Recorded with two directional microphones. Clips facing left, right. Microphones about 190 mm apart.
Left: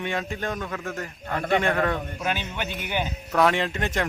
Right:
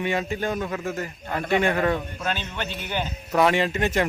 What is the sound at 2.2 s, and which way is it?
Speech, 10° left (ahead or behind).